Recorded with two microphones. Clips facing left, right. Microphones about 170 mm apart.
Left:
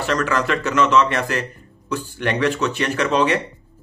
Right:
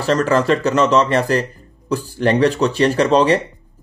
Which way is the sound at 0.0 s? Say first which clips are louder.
Right 5 dB; 35° right (ahead or behind).